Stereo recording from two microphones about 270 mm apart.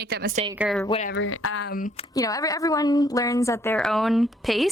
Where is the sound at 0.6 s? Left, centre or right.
Centre.